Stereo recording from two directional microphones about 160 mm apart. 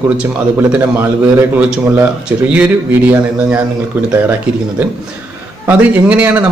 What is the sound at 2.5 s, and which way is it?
Speech, 10° right (ahead or behind).